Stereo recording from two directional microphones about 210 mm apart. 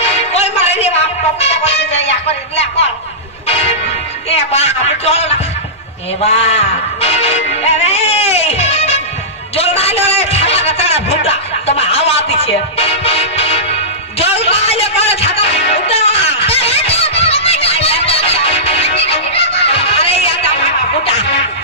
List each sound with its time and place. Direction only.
0.0 s music: 30° left (ahead or behind)
4.5 s a man's voice: 30° left (ahead or behind)
6.2 s music: 30° left (ahead or behind)
9.6 s a man's voice: 30° left (ahead or behind)
14.1 s a sound: 30° left (ahead or behind)